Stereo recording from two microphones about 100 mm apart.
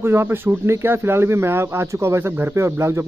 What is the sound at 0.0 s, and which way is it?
Speech, 25° right (ahead or behind).